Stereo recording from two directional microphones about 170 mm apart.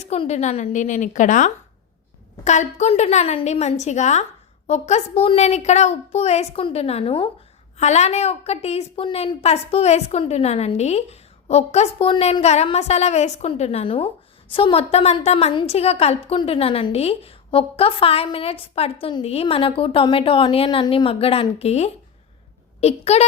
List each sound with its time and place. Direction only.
0.0 s a woman's voice: 40° left (ahead or behind)